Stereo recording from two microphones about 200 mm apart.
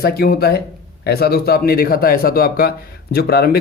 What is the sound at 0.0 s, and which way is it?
Speech, 50° left (ahead or behind).